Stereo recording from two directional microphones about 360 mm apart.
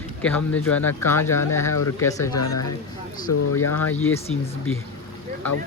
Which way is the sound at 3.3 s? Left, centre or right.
Left.